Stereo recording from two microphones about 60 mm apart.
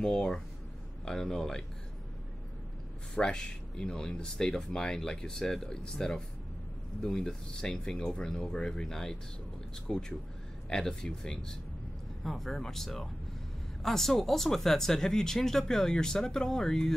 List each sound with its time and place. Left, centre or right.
0.0 s speech: centre
3.2 s speech: centre